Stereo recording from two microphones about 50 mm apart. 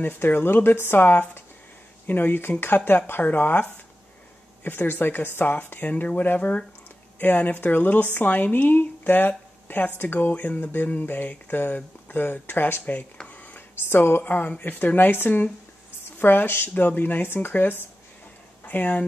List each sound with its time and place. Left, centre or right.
0.0 s a woman's voice: left
10.6 s speech: left
13.3 s a sound: left
13.8 s a woman's voice: left